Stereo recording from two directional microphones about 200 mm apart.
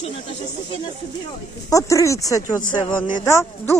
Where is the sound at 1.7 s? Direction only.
15° left (ahead or behind).